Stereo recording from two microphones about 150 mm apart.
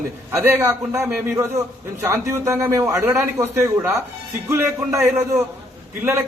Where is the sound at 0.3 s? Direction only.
15° right (ahead or behind).